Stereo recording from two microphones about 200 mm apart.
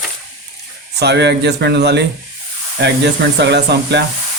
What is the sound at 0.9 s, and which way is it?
Speech, 60° right (ahead or behind).